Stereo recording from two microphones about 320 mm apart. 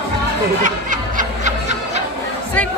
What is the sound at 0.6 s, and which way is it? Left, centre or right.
Snicker, right.